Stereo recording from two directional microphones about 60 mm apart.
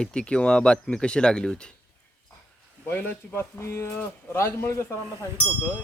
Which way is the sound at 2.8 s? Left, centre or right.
Left.